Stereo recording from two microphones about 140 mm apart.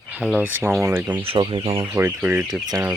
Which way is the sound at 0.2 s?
10° right (ahead or behind).